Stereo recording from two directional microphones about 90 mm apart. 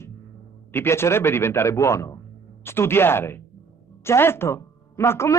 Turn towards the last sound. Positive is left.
turn(degrees=30)  # may be behind; listen again after turning